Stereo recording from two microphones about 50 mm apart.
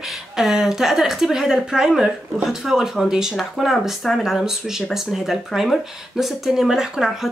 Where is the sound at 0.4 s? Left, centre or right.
Centre.